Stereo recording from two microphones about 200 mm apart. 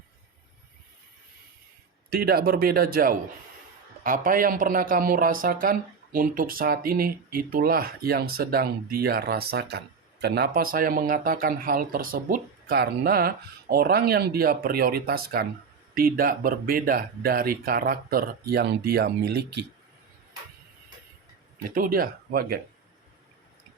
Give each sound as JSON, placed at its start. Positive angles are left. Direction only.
{"t": 2.0, "sound": "speech", "side_deg": -50}
{"t": 21.8, "sound": "speech", "side_deg": -45}